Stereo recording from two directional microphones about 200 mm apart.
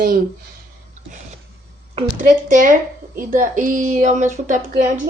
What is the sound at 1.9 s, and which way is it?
A woman's voice, 35° right (ahead or behind).